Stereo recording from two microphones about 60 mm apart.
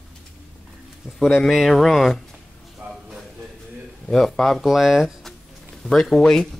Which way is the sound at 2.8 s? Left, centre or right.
Right.